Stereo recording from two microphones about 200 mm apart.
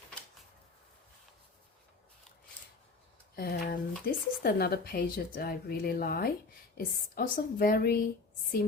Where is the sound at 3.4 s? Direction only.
45° left (ahead or behind).